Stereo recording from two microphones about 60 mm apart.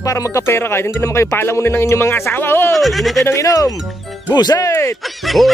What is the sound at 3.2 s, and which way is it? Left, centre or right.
Speech, left.